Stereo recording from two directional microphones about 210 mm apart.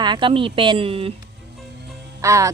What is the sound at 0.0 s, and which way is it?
Speech, 20° right (ahead or behind).